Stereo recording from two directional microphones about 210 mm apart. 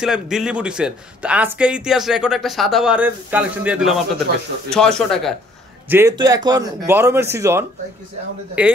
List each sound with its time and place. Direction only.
0.0 s speech: centre (ahead or behind)
5.9 s a man's voice: 10° right (ahead or behind)